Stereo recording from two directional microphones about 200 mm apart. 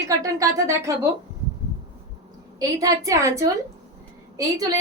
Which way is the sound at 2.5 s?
15° right (ahead or behind).